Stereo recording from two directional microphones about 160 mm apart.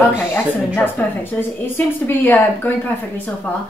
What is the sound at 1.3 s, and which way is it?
A woman's voice, 15° left (ahead or behind).